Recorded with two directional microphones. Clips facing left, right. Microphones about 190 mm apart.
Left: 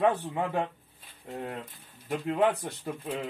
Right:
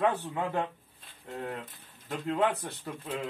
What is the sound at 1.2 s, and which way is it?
Speech, 10° left (ahead or behind).